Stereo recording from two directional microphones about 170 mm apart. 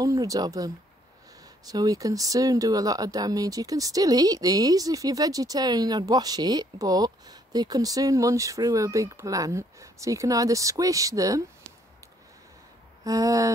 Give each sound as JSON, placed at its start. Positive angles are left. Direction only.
{"t": 0.0, "sound": "speech", "side_deg": -20}
{"t": 1.7, "sound": "speech", "side_deg": -20}
{"t": 13.0, "sound": "speech", "side_deg": -20}